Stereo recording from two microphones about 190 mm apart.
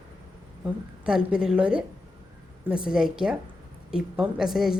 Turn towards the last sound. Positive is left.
turn(degrees=0)  # may be behind; listen again after turning